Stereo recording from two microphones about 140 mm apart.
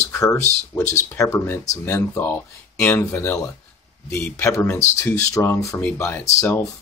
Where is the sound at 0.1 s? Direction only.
20° left (ahead or behind).